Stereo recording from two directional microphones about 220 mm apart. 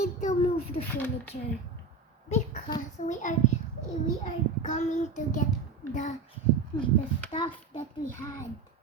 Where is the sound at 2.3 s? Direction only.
30° left (ahead or behind).